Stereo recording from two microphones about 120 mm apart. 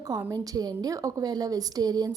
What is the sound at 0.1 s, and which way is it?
A woman's voice, 30° right (ahead or behind).